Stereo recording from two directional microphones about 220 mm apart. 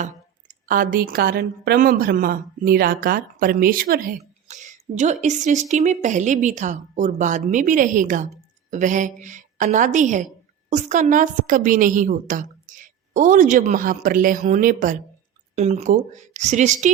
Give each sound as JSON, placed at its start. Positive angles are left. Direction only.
{"t": 0.0, "sound": "a woman's voice", "side_deg": -35}